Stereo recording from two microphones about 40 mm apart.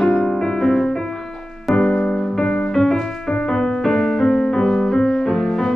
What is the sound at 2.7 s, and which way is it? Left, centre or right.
Music, centre.